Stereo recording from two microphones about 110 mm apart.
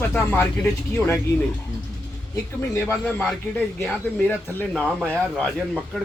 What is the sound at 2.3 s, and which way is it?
Speech, 20° left (ahead or behind).